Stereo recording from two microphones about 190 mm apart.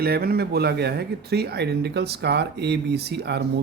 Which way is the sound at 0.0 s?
55° right (ahead or behind).